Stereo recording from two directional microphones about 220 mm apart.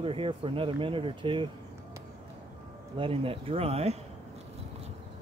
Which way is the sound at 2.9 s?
25° right (ahead or behind).